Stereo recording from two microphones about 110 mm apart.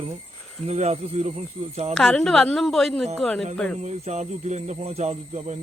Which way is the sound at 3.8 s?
90° right.